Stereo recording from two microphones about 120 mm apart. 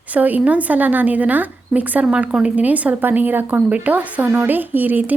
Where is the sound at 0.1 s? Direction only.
15° right (ahead or behind).